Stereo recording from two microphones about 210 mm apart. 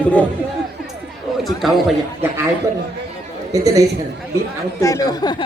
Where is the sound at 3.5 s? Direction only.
15° right (ahead or behind).